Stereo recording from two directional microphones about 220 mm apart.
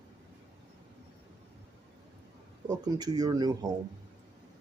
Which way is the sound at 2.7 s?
15° right (ahead or behind).